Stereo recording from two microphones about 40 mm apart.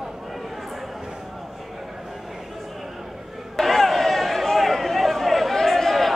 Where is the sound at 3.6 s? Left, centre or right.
Centre.